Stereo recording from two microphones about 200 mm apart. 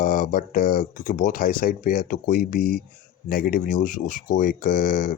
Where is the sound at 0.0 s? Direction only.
45° left (ahead or behind).